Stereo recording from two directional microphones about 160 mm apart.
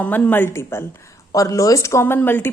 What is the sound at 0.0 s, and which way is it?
A woman's voice, 10° left (ahead or behind).